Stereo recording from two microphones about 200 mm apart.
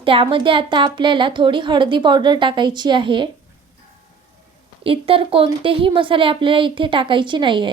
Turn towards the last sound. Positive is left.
turn(degrees=-25)  # may be behind; listen again after turning